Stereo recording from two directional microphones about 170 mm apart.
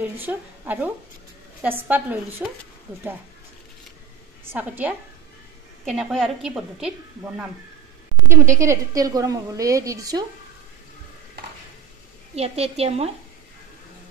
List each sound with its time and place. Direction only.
0.0 s a woman's voice: 10° right (ahead or behind)
4.5 s a woman's voice: 10° right (ahead or behind)
5.9 s a woman's voice: centre (ahead or behind)
8.3 s a woman's voice: 15° right (ahead or behind)
12.4 s a woman's voice: 35° right (ahead or behind)